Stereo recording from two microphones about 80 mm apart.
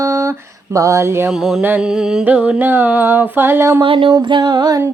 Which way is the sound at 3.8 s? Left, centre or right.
Right.